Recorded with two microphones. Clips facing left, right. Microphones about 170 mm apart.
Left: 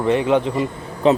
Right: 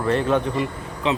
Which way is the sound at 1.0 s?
40° left (ahead or behind).